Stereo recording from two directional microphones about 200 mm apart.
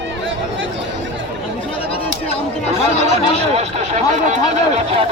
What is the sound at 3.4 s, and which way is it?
Speech, 30° right (ahead or behind).